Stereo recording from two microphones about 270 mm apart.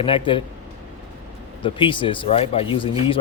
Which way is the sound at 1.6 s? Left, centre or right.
Centre.